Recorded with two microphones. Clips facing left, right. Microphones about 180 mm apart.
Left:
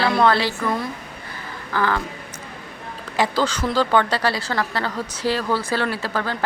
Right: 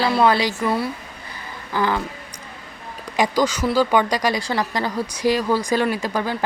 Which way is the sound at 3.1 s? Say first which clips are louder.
Right 2 dB; 15° right (ahead or behind).